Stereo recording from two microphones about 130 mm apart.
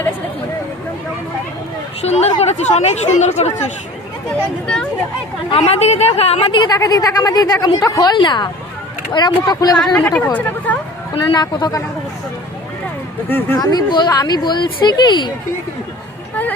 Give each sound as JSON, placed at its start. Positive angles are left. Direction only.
{"t": 2.0, "sound": "a woman's voice", "side_deg": 55}
{"t": 4.6, "sound": "speech", "side_deg": 5}
{"t": 5.5, "sound": "a woman's voice", "side_deg": 50}
{"t": 6.7, "sound": "speech", "side_deg": 30}
{"t": 9.7, "sound": "speech", "side_deg": 10}
{"t": 11.3, "sound": "speech", "side_deg": 30}
{"t": 13.6, "sound": "speech", "side_deg": 30}